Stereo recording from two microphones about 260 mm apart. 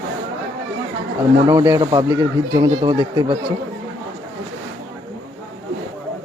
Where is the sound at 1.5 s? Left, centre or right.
Centre.